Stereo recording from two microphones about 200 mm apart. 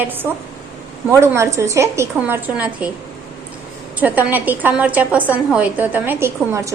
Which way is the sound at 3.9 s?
10° right (ahead or behind).